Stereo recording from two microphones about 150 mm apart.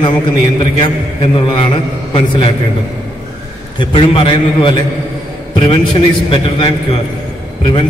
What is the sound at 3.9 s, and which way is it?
A man's voice, 35° left (ahead or behind).